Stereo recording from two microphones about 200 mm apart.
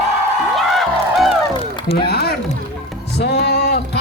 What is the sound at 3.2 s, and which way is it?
Music, 55° left (ahead or behind).